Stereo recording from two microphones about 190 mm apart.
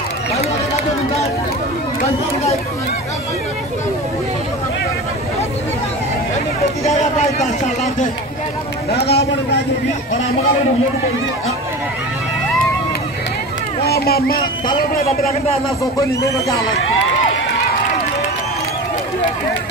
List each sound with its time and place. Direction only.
0.4 s run: 35° left (ahead or behind)
6.8 s a sound: 35° left (ahead or behind)
8.9 s speech: 60° left (ahead or behind)
13.8 s speech: 55° left (ahead or behind)